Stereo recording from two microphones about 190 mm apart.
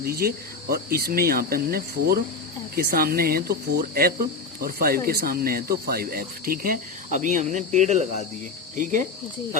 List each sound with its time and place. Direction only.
0.0 s speech: 50° right (ahead or behind)